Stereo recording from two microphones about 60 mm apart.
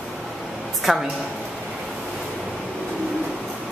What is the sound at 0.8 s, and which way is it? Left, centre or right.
Speech, centre.